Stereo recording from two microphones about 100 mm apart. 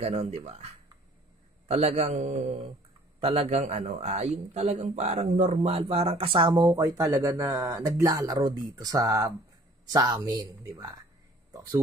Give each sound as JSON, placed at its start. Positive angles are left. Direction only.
{"t": 0.0, "sound": "a man's voice", "side_deg": -90}
{"t": 1.7, "sound": "a man's voice", "side_deg": -90}
{"t": 3.2, "sound": "a man's voice", "side_deg": -70}
{"t": 6.7, "sound": "speech", "side_deg": -35}
{"t": 8.4, "sound": "speech", "side_deg": -50}
{"t": 8.7, "sound": "speech", "side_deg": -35}